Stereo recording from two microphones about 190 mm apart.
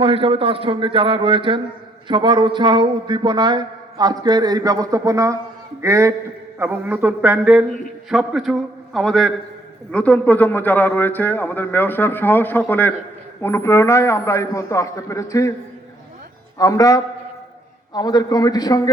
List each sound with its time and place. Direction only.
0.0 s a man's voice: 30° right (ahead or behind); by 15.5 s 15° left (ahead or behind)
16.6 s a man's voice: 20° left (ahead or behind)